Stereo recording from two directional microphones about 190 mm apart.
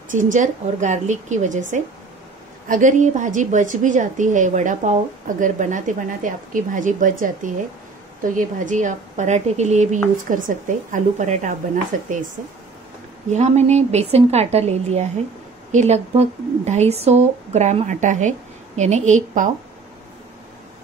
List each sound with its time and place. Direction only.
0.1 s a woman's voice: 40° right (ahead or behind)
13.3 s speech: 35° right (ahead or behind)